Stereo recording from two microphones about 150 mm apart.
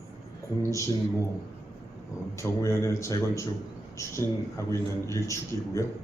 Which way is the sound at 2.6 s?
20° left (ahead or behind).